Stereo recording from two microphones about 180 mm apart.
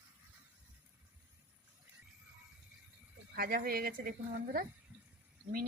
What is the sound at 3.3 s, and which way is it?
Speech, 55° right (ahead or behind).